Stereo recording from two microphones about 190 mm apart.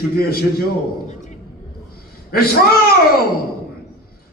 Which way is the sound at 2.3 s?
55° left (ahead or behind).